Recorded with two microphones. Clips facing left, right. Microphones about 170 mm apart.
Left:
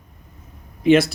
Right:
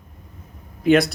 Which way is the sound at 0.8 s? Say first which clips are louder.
Left 1 dB; centre (ahead or behind).